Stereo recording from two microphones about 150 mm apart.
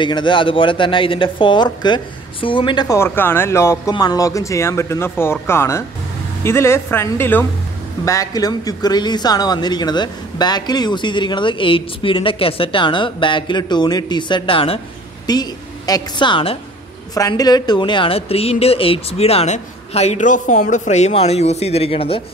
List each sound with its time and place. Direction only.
0.0 s speech: 30° left (ahead or behind)
3.0 s speech: 15° left (ahead or behind); by 14.8 s 35° left (ahead or behind)
15.2 s a woman's voice: 25° left (ahead or behind)